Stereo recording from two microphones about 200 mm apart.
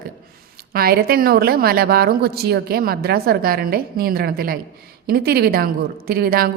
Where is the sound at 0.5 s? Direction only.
50° right (ahead or behind).